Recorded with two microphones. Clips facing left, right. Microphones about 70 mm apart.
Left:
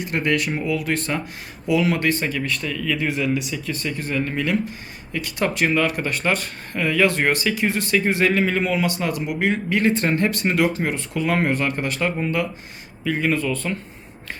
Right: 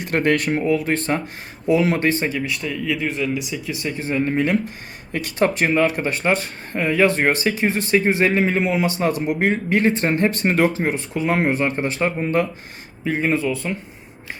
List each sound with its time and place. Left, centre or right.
0.0 s speech: right
2.4 s speech: centre
3.0 s speech: centre
3.8 s speech: right
10.8 s speech: right
13.1 s speech: right
13.5 s speech: centre